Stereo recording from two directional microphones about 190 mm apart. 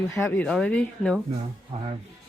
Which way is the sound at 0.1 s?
15° left (ahead or behind).